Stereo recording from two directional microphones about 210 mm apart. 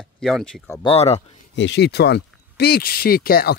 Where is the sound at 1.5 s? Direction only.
55° left (ahead or behind).